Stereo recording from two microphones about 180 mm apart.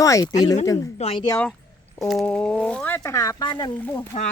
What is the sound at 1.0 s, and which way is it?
Speech, 30° left (ahead or behind).